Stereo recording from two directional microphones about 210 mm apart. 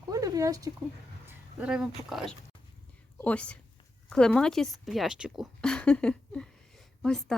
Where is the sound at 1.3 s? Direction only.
5° right (ahead or behind).